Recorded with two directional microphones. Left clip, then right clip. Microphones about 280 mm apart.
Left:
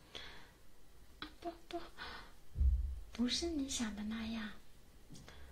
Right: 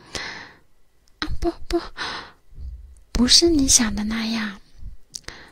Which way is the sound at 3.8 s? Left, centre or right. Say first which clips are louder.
Right 18 dB; right.